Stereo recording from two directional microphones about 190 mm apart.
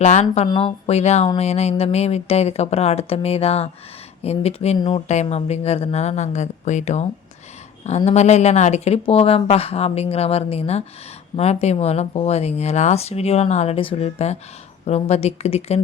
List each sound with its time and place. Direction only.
0.0 s speech: 35° left (ahead or behind)